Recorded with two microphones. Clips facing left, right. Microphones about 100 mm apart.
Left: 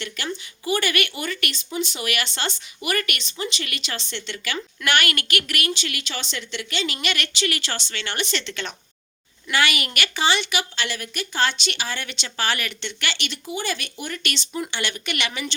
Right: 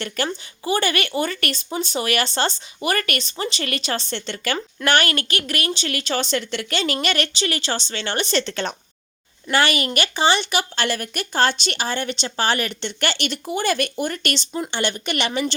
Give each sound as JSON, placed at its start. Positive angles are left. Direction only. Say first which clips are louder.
{"t": 0.0, "sound": "speech", "louder": "right 5 dB", "side_deg": -40}
{"t": 14.5, "sound": "speech", "louder": "right 3 dB", "side_deg": -30}